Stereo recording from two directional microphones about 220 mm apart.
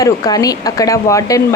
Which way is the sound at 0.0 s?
15° left (ahead or behind).